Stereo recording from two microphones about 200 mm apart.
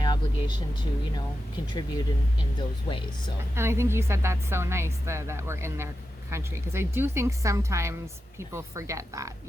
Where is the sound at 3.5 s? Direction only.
10° right (ahead or behind).